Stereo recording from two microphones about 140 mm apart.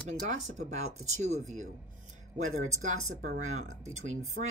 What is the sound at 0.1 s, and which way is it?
Speech, 60° right (ahead or behind).